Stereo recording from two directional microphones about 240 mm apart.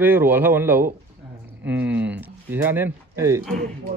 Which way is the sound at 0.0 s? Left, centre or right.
Centre.